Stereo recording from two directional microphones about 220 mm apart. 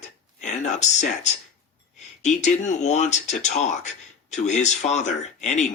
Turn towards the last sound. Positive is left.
turn(degrees=30)  # may be behind; listen again after turning